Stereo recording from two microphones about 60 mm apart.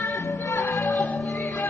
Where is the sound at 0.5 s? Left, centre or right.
Left.